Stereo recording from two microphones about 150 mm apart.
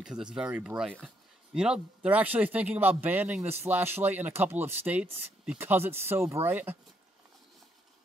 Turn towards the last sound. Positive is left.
turn(degrees=-15)  # may be behind; listen again after turning